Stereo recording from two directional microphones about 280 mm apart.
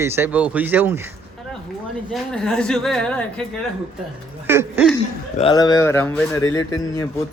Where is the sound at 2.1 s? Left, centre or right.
Centre.